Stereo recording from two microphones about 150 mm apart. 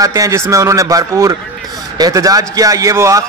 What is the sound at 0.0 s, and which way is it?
A man's voice, 20° right (ahead or behind).